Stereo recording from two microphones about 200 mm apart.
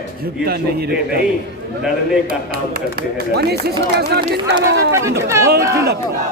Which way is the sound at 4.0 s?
55° right (ahead or behind).